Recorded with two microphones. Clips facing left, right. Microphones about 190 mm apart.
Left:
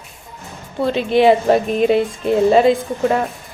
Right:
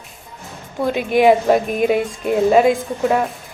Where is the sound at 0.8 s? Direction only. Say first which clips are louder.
Left 1 dB; 15° right (ahead or behind).